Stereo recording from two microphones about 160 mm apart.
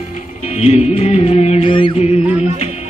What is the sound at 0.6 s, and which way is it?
Music, 40° left (ahead or behind).